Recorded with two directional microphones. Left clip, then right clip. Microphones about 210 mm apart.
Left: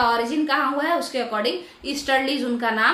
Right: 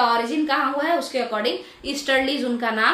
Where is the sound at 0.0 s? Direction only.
10° left (ahead or behind).